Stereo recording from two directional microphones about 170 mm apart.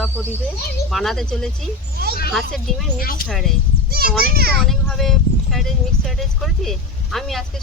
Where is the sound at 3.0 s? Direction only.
60° left (ahead or behind).